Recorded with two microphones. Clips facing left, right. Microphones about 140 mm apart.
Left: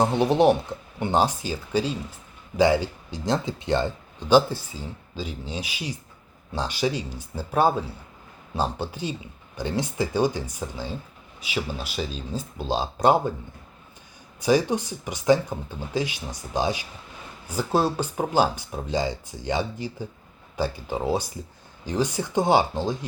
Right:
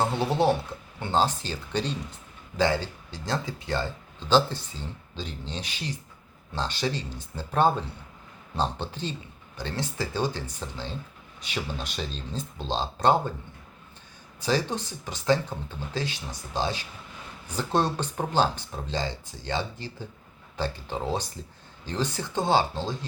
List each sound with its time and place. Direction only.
0.0 s speech: 15° left (ahead or behind)
14.4 s speech: 15° left (ahead or behind)